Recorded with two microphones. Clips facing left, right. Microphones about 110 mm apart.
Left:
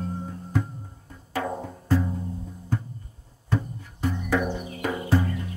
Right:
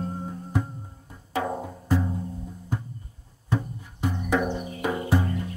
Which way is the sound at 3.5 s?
15° right (ahead or behind).